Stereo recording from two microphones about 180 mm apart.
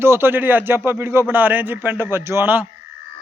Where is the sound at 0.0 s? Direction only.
15° right (ahead or behind).